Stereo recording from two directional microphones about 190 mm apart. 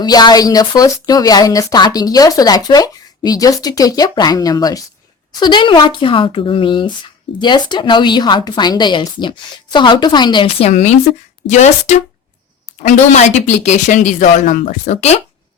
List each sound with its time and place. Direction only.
0.0 s speech: 20° left (ahead or behind); by 15.2 s 35° left (ahead or behind)